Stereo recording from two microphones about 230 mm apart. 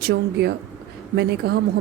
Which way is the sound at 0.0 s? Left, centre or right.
Right.